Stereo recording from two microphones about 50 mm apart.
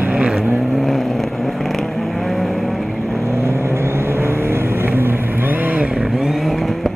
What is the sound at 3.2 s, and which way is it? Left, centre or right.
Vehicle, right.